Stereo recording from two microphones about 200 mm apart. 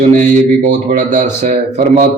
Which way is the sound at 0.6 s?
35° right (ahead or behind).